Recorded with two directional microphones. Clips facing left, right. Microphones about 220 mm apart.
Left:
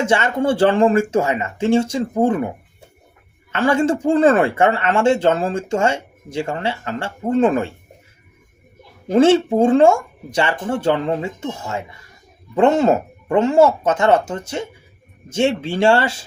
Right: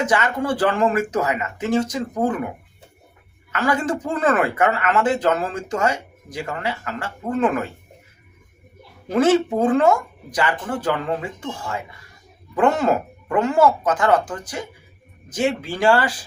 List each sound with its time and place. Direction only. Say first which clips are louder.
0.0 s speech: left 3 dB; 25° left (ahead or behind)
3.5 s speech: left 5 dB; 25° left (ahead or behind)
9.0 s speech: left 4 dB; 25° left (ahead or behind)